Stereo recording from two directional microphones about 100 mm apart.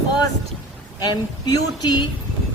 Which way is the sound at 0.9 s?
45° left (ahead or behind).